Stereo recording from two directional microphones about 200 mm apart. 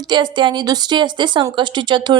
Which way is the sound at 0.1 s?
20° right (ahead or behind).